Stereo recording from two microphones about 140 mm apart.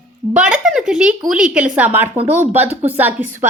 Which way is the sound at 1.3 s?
5° right (ahead or behind).